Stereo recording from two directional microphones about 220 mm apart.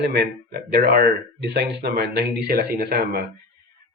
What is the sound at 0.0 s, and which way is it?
Speech, 45° right (ahead or behind).